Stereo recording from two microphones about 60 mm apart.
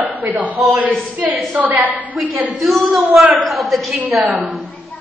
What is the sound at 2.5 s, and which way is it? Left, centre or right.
A woman's voice, centre.